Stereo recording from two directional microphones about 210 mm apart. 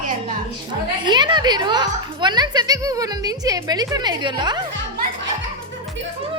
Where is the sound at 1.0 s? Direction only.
20° right (ahead or behind).